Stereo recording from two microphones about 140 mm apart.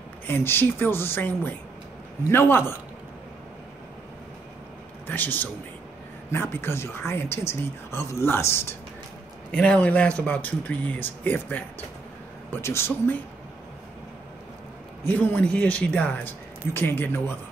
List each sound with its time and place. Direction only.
0.3 s speech: 15° left (ahead or behind)
5.0 s speech: 15° left (ahead or behind)
15.0 s speech: 10° left (ahead or behind)